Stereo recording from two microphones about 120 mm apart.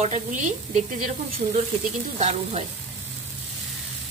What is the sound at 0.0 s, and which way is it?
Speech, 90° right.